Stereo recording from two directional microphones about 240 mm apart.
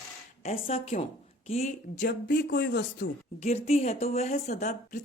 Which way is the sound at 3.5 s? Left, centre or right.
Left.